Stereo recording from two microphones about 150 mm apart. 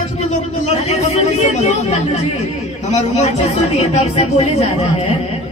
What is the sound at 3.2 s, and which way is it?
Speech, 45° left (ahead or behind).